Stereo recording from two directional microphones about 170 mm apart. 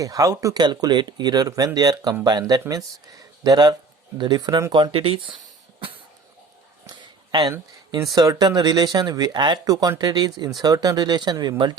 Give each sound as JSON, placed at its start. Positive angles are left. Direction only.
{"t": 0.0, "sound": "speech", "side_deg": -20}
{"t": 6.8, "sound": "a sound", "side_deg": -25}
{"t": 8.1, "sound": "speech", "side_deg": -25}